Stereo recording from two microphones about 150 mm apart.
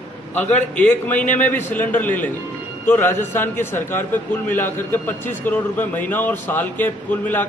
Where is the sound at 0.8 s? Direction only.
10° left (ahead or behind).